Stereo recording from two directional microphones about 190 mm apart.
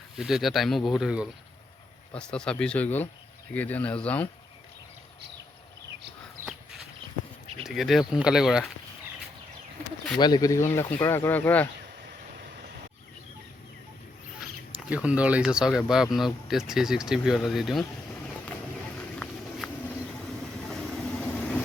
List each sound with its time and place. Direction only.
0.2 s speech: centre (ahead or behind)
7.6 s speech: centre (ahead or behind)
10.2 s speech: 20° left (ahead or behind)
14.8 s speech: 5° right (ahead or behind)
19.2 s a sound: 5° left (ahead or behind)
20.7 s vehicle: centre (ahead or behind)